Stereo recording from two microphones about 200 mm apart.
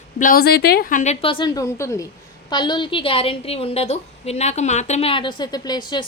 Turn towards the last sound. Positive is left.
turn(degrees=20)  # may be behind; listen again after turning